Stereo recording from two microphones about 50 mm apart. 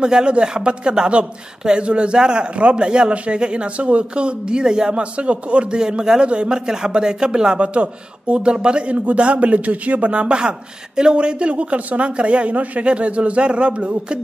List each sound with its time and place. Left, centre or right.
0.0 s speech: centre